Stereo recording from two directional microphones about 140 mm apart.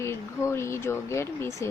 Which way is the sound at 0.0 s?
20° left (ahead or behind).